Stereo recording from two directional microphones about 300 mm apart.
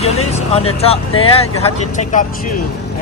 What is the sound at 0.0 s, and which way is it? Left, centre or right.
Speech, left.